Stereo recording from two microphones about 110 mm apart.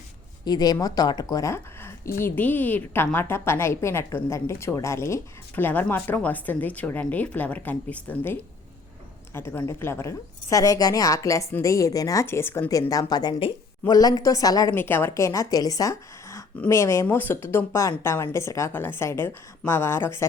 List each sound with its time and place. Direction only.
0.4 s a woman's voice: 35° left (ahead or behind); by 12.9 s 20° left (ahead or behind)
12.9 s speech: 35° left (ahead or behind)
14.8 s speech: 20° left (ahead or behind)